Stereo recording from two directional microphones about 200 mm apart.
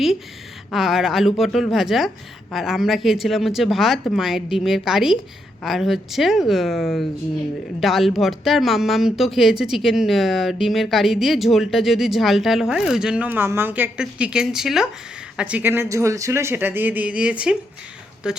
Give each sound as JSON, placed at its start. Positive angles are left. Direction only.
{"t": 0.7, "sound": "speech", "side_deg": 0}